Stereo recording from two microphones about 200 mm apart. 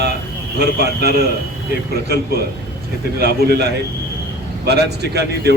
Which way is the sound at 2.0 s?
50° right (ahead or behind).